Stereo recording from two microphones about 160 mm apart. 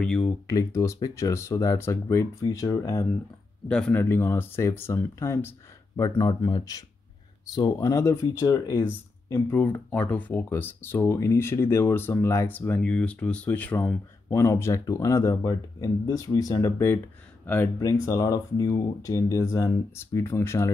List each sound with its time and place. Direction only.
0.0 s speech: 5° left (ahead or behind)
0.5 s speech: 20° left (ahead or behind)
3.6 s speech: 5° left (ahead or behind)